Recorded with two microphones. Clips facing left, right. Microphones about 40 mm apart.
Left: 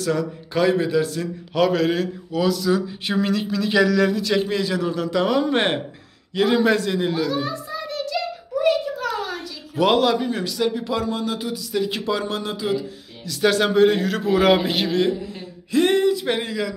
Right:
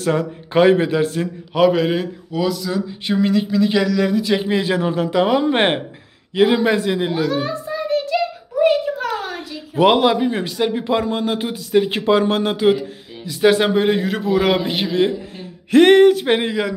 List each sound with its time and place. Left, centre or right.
0.0 s a man's voice: right
1.5 s speech: centre
4.6 s speech: right
7.2 s a sound: right
9.8 s a man's voice: right
13.2 s speech: right
14.2 s speech: centre
15.7 s a sound: right
16.3 s a man's voice: right